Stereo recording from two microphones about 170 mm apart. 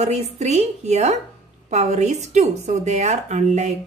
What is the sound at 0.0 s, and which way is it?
Speech, 40° right (ahead or behind).